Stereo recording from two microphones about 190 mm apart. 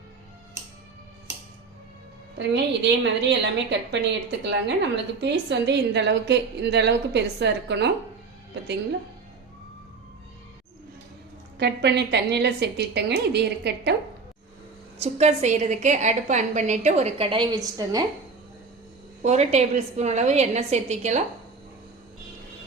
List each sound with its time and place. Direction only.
2.4 s a woman's voice: 65° right (ahead or behind)
11.6 s a woman's voice: 60° right (ahead or behind)
14.9 s a woman's voice: 35° right (ahead or behind)
19.2 s a woman's voice: 35° right (ahead or behind)